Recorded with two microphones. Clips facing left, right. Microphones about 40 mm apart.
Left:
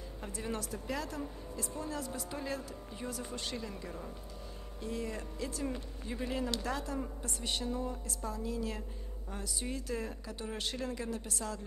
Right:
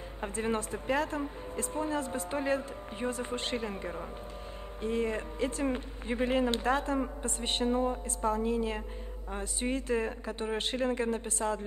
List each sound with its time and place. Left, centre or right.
0.2 s speech: right